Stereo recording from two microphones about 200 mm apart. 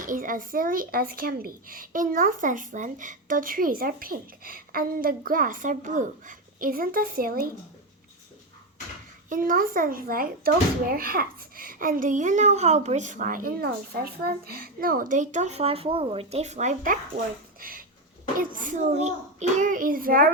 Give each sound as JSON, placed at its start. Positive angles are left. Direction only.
{"t": 0.0, "sound": "a child's voice", "side_deg": -40}
{"t": 9.3, "sound": "a child's voice", "side_deg": -45}
{"t": 17.6, "sound": "a sound", "side_deg": -45}
{"t": 18.3, "sound": "a child's voice", "side_deg": -40}